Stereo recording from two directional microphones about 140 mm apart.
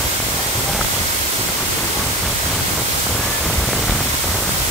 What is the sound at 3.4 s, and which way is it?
Pink noise, centre (ahead or behind).